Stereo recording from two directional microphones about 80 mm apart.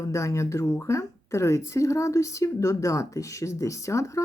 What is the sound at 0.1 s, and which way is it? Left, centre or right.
Speech, left.